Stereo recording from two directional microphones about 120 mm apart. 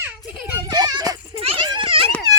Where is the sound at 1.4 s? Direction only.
50° right (ahead or behind).